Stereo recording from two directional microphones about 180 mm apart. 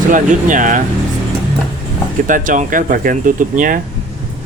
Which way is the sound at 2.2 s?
45° right (ahead or behind).